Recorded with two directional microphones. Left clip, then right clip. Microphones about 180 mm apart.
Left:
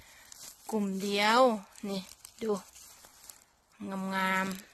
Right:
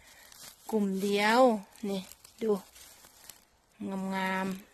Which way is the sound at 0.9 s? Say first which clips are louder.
Even; 25° right (ahead or behind).